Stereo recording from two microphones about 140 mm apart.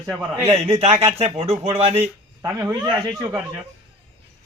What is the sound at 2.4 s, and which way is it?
Speech, 20° right (ahead or behind).